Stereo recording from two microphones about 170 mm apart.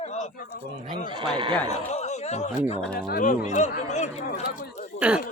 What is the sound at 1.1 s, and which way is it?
Speech, 30° right (ahead or behind).